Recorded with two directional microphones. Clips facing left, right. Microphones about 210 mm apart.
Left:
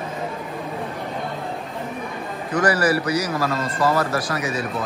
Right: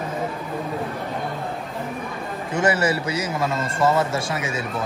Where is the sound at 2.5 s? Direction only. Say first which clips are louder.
Left 2 dB; 25° right (ahead or behind).